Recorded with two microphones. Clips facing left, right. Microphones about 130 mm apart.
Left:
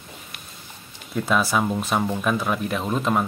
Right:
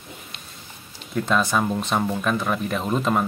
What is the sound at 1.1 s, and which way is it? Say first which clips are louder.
Speech: even; 5° left (ahead or behind).